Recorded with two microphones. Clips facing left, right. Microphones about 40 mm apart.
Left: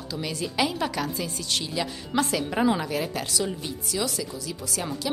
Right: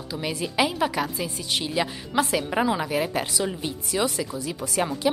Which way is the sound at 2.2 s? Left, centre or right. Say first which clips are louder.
Right 1 dB; centre.